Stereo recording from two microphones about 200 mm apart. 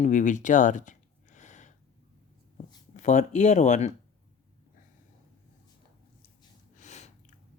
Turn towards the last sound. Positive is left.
turn(degrees=35)  # may be behind; listen again after turning